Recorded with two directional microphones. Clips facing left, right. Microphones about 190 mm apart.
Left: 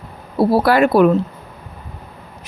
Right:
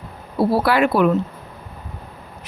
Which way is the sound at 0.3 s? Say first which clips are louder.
Left 3 dB; 40° left (ahead or behind).